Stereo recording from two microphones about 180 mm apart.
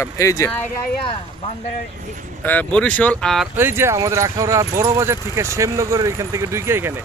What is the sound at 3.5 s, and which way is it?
Speech, 10° right (ahead or behind).